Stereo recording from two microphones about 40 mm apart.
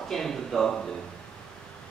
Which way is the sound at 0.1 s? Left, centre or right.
Centre.